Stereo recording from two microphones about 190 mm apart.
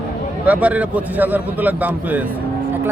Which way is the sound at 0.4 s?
10° right (ahead or behind).